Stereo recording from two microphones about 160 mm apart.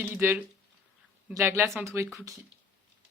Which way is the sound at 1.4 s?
15° right (ahead or behind).